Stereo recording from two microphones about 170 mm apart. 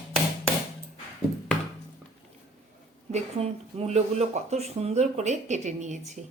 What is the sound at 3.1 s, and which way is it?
A woman's voice, 40° right (ahead or behind).